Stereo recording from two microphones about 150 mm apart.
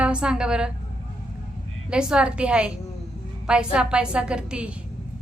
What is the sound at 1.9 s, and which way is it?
A woman's voice, 5° right (ahead or behind).